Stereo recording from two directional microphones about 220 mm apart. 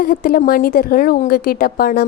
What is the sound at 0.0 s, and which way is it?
A woman's voice, 40° left (ahead or behind).